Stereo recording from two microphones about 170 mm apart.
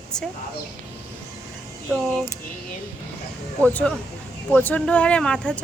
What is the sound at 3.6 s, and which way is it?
Speech, 10° left (ahead or behind).